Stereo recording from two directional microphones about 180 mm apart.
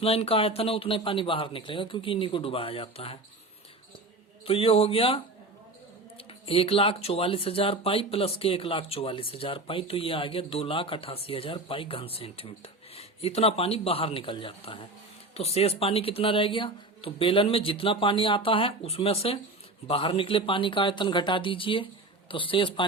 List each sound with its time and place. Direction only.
0.0 s speech: 35° left (ahead or behind)
4.4 s speech: 30° left (ahead or behind)